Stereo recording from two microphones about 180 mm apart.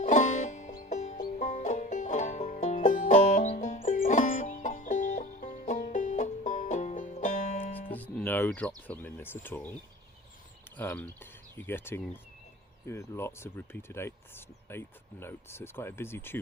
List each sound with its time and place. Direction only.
0.0 s music: 40° left (ahead or behind)
7.9 s speech: 10° left (ahead or behind)
10.8 s speech: 10° left (ahead or behind)